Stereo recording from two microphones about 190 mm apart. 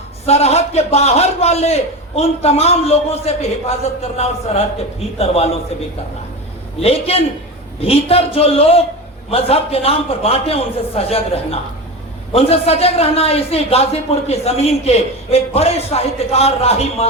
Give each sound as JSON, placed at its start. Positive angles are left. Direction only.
{"t": 0.3, "sound": "a man's voice", "side_deg": 35}
{"t": 6.8, "sound": "a man's voice", "side_deg": 30}